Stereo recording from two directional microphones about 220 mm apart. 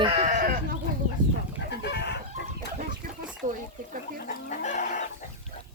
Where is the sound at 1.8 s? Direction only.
50° left (ahead or behind).